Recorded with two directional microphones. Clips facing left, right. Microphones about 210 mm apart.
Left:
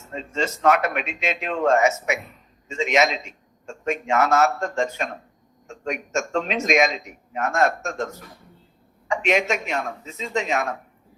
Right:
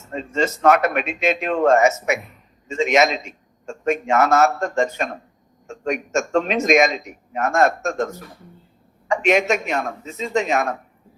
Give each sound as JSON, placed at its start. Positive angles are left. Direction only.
{"t": 0.1, "sound": "a man's voice", "side_deg": -45}
{"t": 9.0, "sound": "a man's voice", "side_deg": -45}